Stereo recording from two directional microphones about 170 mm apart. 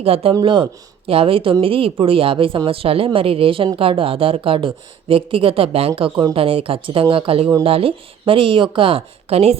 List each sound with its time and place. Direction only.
0.0 s a woman's voice: 35° right (ahead or behind)